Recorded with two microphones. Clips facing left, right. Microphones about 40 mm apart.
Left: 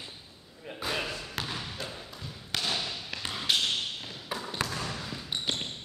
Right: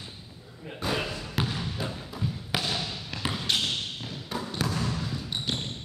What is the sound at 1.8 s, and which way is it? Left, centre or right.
Thump, centre.